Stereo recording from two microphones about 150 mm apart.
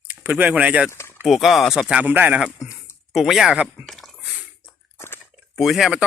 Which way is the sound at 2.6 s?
20° left (ahead or behind).